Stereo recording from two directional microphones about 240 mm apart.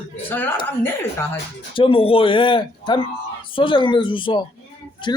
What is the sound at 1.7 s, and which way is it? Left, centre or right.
Speech, left.